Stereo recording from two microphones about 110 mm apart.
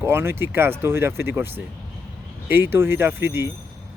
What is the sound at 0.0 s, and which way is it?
Speech, 20° right (ahead or behind).